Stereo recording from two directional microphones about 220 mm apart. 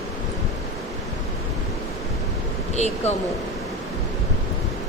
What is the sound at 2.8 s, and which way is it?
Speech, 30° left (ahead or behind).